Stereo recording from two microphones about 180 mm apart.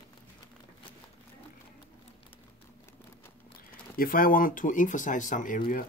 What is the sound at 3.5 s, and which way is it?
Speech, 55° left (ahead or behind).